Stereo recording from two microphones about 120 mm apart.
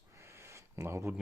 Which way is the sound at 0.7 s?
20° right (ahead or behind).